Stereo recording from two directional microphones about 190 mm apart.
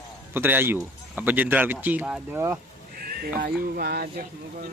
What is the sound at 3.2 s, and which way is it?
Speech, 55° right (ahead or behind).